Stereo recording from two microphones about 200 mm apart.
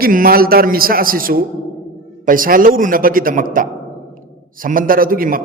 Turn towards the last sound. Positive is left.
turn(degrees=-45)  # may be behind; listen again after turning